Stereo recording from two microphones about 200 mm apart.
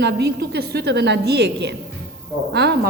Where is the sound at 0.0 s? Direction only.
55° right (ahead or behind).